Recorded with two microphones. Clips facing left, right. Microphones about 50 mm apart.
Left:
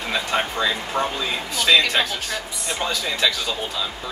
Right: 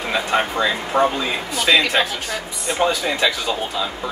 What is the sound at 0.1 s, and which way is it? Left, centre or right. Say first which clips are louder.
A woman's voice: right 3 dB; centre.